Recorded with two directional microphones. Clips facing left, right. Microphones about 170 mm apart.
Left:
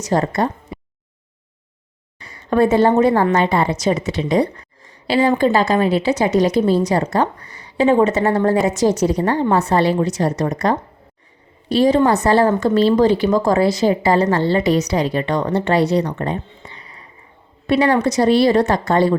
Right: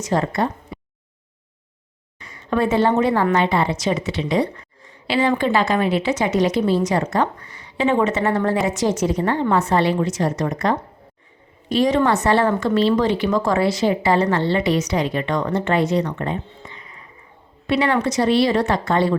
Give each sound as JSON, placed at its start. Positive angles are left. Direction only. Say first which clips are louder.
{"t": 0.0, "sound": "speech", "louder": "left 2 dB", "side_deg": 40}
{"t": 2.1, "sound": "a woman's voice", "louder": "left 5 dB", "side_deg": 35}